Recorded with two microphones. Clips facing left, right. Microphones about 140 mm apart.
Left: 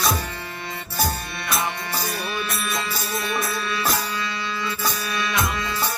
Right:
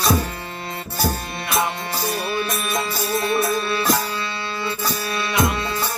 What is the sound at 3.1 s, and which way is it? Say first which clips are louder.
Music: right 6 dB; 30° right (ahead or behind).